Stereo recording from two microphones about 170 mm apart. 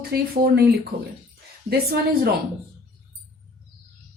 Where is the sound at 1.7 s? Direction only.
65° right (ahead or behind).